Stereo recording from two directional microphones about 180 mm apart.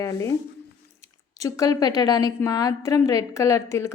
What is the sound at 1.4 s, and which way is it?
A woman's voice, 20° left (ahead or behind).